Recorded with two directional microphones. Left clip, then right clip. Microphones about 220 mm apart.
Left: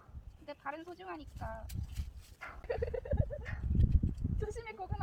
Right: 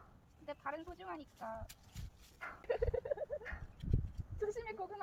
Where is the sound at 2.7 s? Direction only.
5° left (ahead or behind).